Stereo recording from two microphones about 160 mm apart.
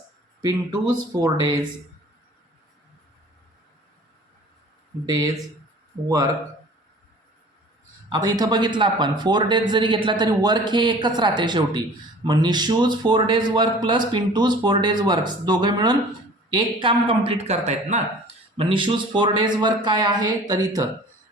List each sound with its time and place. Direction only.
0.4 s speech: 20° right (ahead or behind)
5.0 s speech: 20° right (ahead or behind)
8.1 s a man's voice: 25° right (ahead or behind); by 18.0 s 45° right (ahead or behind)
18.5 s a man's voice: 35° right (ahead or behind)